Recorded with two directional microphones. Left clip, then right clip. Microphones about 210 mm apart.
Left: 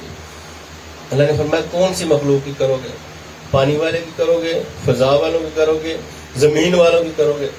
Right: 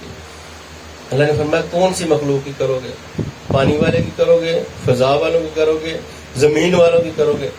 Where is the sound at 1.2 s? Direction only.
40° right (ahead or behind).